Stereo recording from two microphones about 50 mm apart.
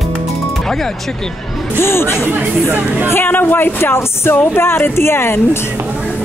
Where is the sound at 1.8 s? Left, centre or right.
Left.